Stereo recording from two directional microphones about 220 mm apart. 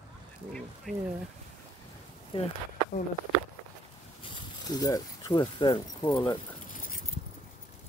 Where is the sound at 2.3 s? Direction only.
25° left (ahead or behind).